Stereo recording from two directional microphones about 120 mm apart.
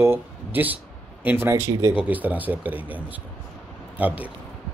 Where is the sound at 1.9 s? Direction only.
15° right (ahead or behind).